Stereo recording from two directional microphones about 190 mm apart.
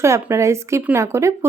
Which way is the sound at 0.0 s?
15° right (ahead or behind).